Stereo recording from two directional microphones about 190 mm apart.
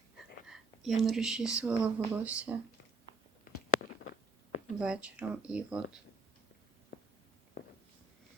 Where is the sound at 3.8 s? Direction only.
50° left (ahead or behind).